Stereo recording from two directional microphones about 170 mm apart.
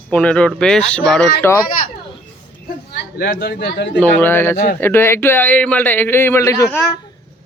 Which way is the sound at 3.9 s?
10° left (ahead or behind).